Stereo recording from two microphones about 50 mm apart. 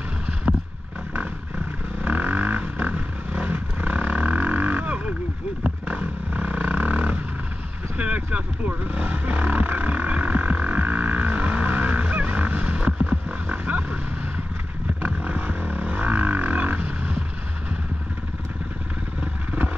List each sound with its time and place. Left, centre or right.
2.0 s a sound: right
3.4 s wild animals: right
5.6 s vehicle: right
13.1 s roaring cats: right
15.2 s vehicle: right